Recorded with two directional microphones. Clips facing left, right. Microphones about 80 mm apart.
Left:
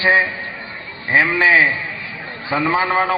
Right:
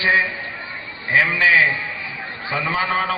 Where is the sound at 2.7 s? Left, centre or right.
Left.